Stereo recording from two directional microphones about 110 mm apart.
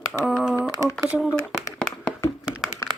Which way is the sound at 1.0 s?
15° right (ahead or behind).